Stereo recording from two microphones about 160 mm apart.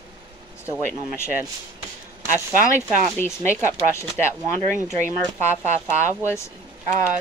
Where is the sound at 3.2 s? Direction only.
15° left (ahead or behind).